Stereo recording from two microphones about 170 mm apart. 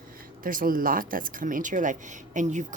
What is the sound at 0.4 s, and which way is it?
Speech, 55° right (ahead or behind).